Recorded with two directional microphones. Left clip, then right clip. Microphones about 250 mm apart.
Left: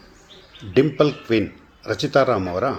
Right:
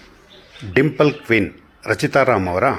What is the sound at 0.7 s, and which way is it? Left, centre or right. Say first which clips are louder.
A man's voice: right 2 dB; right.